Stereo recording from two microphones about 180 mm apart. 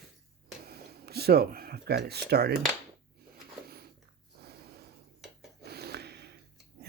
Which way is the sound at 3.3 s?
55° right (ahead or behind).